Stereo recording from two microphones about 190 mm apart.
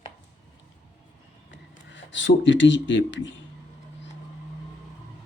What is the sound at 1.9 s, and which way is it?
Speech, 70° left (ahead or behind).